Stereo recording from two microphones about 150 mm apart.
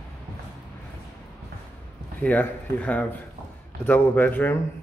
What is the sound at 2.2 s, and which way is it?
Speech, 10° left (ahead or behind).